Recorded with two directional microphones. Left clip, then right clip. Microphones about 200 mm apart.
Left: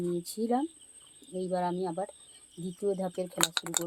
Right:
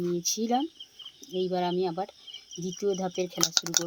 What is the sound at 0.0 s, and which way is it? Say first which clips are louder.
Speech: right 4 dB; 30° right (ahead or behind).